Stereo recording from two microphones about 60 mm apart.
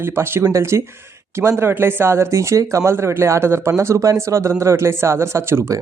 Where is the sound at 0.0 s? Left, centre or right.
Right.